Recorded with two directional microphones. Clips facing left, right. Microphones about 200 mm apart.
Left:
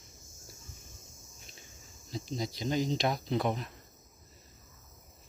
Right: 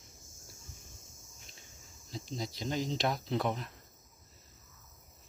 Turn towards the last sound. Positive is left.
turn(degrees=0)  # may be behind; listen again after turning